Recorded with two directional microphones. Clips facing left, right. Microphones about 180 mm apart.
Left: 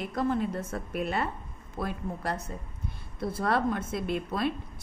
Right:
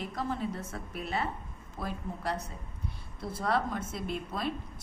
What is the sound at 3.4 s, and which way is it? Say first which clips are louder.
A woman's voice: left 3 dB; 55° left (ahead or behind).